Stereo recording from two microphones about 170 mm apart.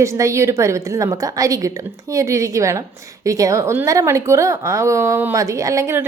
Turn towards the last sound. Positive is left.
turn(degrees=-15)  # may be behind; listen again after turning